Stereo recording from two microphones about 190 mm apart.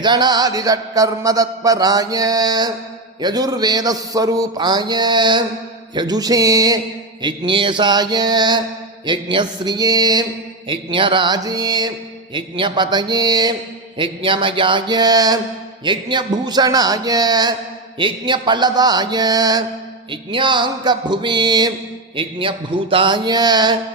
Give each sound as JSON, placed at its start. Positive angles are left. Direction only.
{"t": 0.0, "sound": "a man's voice", "side_deg": -20}